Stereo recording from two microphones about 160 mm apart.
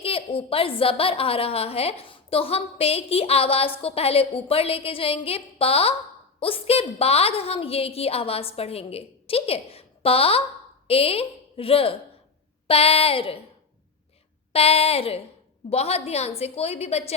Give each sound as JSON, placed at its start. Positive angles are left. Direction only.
{"t": 0.0, "sound": "a woman's voice", "side_deg": 35}
{"t": 14.5, "sound": "a woman's voice", "side_deg": 40}